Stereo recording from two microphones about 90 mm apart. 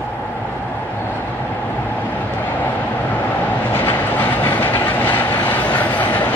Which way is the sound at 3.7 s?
20° left (ahead or behind).